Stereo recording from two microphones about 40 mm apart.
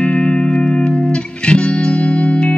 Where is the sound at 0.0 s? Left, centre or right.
Left.